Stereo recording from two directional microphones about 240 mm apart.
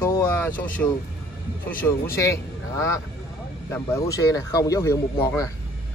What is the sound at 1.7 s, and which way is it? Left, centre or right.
Speech, centre.